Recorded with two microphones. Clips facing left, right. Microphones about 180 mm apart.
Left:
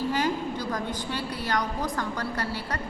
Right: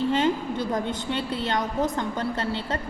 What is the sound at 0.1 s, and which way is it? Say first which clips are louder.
A woman's voice: right 4 dB; 25° right (ahead or behind).